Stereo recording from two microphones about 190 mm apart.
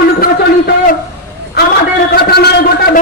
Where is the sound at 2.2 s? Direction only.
55° left (ahead or behind).